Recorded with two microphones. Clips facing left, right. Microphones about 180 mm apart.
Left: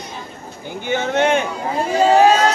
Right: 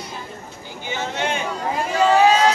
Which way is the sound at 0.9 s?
55° left (ahead or behind).